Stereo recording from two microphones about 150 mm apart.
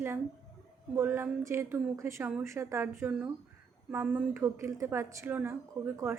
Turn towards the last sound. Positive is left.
turn(degrees=-15)  # may be behind; listen again after turning